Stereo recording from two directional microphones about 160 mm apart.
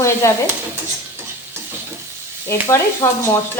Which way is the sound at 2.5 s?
15° left (ahead or behind).